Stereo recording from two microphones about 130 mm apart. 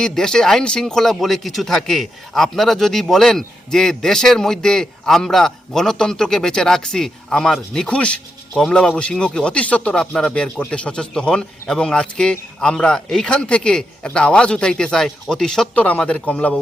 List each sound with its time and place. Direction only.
0.0 s speech: 5° left (ahead or behind)